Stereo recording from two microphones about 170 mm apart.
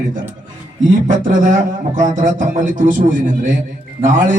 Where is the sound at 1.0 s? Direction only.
50° right (ahead or behind).